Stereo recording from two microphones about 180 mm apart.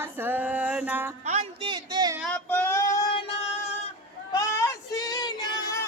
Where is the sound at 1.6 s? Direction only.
25° right (ahead or behind).